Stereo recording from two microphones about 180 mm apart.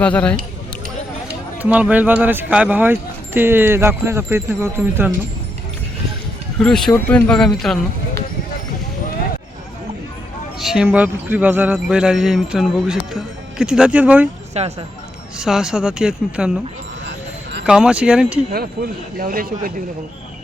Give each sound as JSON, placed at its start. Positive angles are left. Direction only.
{"t": 0.0, "sound": "speech", "side_deg": 5}
{"t": 1.6, "sound": "speech", "side_deg": -10}
{"t": 6.6, "sound": "speech", "side_deg": 5}
{"t": 10.6, "sound": "speech", "side_deg": -5}
{"t": 14.5, "sound": "speech", "side_deg": -35}
{"t": 15.4, "sound": "speech", "side_deg": -5}
{"t": 17.7, "sound": "speech", "side_deg": -5}
{"t": 18.5, "sound": "speech", "side_deg": -60}